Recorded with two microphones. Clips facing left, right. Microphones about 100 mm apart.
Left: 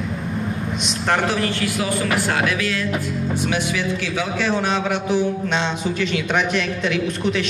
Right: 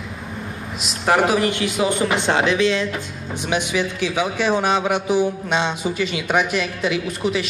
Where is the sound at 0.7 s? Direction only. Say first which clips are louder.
Right 4 dB; 5° right (ahead or behind).